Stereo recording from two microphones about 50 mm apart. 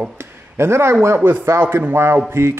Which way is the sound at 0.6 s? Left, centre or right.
Right.